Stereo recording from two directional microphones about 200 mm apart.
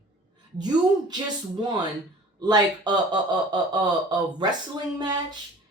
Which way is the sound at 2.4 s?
20° right (ahead or behind).